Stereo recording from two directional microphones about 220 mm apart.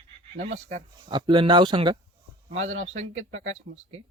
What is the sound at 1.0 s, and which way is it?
Speech, 20° right (ahead or behind).